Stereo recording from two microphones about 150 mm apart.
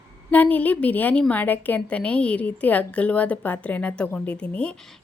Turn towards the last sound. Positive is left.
turn(degrees=5)  # may be behind; listen again after turning